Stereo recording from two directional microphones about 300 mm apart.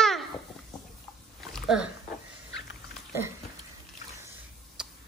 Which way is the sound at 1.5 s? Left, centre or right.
Centre.